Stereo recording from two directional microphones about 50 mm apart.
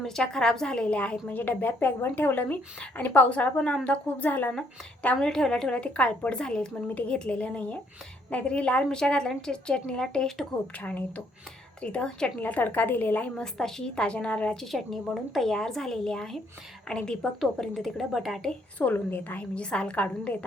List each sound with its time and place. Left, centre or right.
0.2 s a woman's voice: centre
1.4 s speech: left
3.2 s a woman's voice: left
5.1 s a woman's voice: centre
10.8 s a woman's voice: left
12.4 s speech: left
13.3 s a woman's voice: centre; by 14.5 s left
14.5 s a woman's voice: centre
17.4 s speech: centre
18.8 s speech: left
19.4 s a woman's voice: left